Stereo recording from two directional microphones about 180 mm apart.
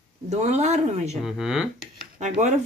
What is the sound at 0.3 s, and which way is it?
Speech, 40° right (ahead or behind).